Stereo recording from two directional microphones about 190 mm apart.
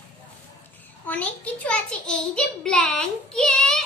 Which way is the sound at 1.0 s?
10° left (ahead or behind).